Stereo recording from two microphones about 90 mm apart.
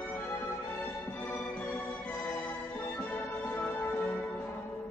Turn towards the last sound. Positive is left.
turn(degrees=15)  # may be behind; listen again after turning